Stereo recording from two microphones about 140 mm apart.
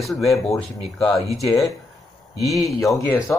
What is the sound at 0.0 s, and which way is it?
Speech, centre (ahead or behind).